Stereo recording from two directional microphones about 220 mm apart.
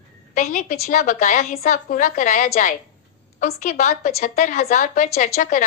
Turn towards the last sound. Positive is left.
turn(degrees=35)  # may be behind; listen again after turning